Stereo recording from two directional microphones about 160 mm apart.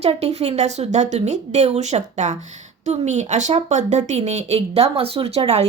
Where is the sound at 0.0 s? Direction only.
40° right (ahead or behind).